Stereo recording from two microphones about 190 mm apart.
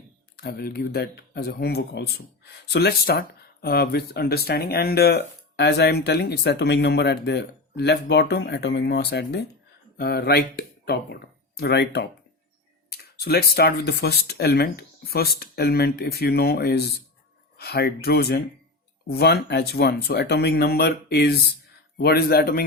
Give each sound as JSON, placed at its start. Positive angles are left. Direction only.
{"t": 0.3, "sound": "speech", "side_deg": 55}